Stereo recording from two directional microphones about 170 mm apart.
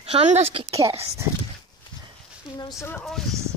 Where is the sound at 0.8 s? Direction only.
15° right (ahead or behind).